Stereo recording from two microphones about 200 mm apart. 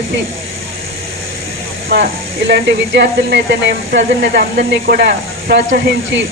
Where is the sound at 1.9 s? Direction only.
50° right (ahead or behind).